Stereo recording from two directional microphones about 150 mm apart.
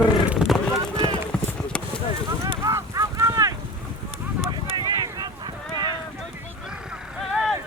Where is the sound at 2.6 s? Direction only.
20° right (ahead or behind).